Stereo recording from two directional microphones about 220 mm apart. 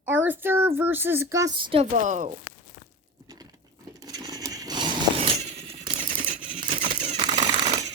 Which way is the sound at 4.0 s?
15° right (ahead or behind).